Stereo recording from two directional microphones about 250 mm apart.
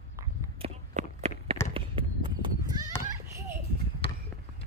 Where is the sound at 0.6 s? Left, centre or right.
Right.